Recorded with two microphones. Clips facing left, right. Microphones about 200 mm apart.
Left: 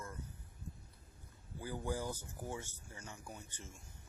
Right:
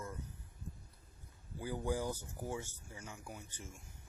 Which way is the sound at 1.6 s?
15° right (ahead or behind).